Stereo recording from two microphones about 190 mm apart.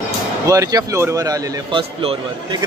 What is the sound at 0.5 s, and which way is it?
A man's voice, 20° right (ahead or behind).